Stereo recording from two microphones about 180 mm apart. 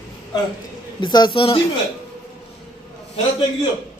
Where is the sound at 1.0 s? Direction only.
25° left (ahead or behind).